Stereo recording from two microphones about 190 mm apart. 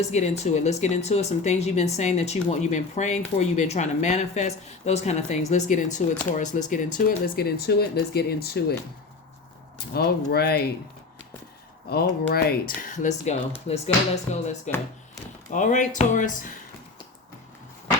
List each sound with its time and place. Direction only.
0.0 s speech: 35° left (ahead or behind); by 8.6 s 55° left (ahead or behind)
9.7 s speech: 55° left (ahead or behind)
11.9 s speech: 55° left (ahead or behind)